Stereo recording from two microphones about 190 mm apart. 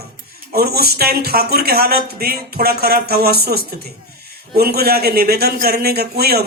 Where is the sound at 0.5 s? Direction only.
55° right (ahead or behind).